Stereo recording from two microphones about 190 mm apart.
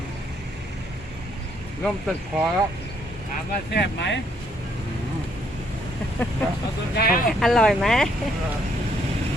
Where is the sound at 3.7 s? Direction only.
65° left (ahead or behind).